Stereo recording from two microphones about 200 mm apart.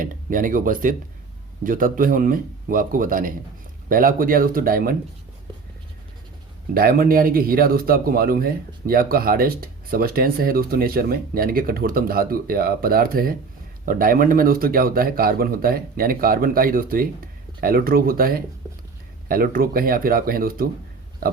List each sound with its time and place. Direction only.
0.0 s a man's voice: 45° right (ahead or behind)
6.7 s a man's voice: 45° right (ahead or behind)